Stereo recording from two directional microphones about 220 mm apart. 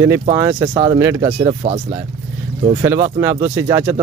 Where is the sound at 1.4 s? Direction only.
25° right (ahead or behind).